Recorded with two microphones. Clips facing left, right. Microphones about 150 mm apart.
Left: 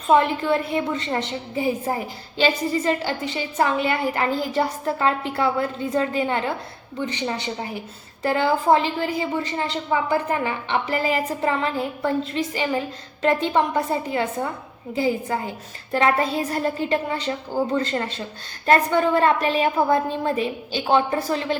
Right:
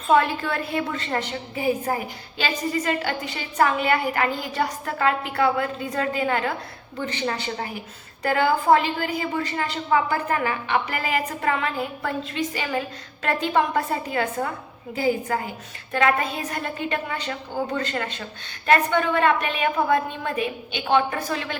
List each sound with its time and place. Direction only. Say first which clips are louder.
0.1 s a woman's voice: left 2 dB; 25° left (ahead or behind)